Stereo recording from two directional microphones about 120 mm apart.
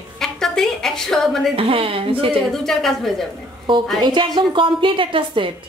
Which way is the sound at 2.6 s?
5° left (ahead or behind).